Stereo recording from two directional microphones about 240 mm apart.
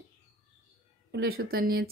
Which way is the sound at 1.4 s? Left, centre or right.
Right.